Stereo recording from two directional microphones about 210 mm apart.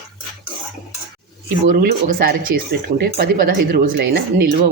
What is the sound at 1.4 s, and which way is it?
Speech, 50° right (ahead or behind).